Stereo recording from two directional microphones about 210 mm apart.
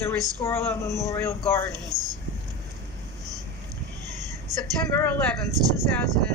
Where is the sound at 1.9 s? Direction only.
20° right (ahead or behind).